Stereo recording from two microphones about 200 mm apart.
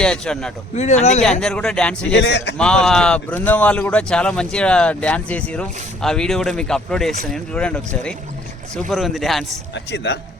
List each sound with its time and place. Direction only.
0.0 s speech: 5° left (ahead or behind)
0.8 s speech: 35° left (ahead or behind)
1.2 s speech: 5° left (ahead or behind)
2.1 s a man's voice: 60° left (ahead or behind)
2.6 s speech: 5° left (ahead or behind)
9.7 s a man's voice: 60° left (ahead or behind)